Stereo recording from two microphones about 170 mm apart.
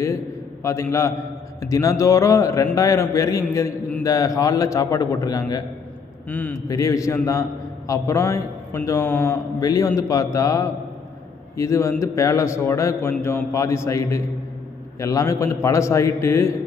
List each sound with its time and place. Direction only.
0.7 s a man's voice: 15° left (ahead or behind)
6.2 s a man's voice: 10° left (ahead or behind)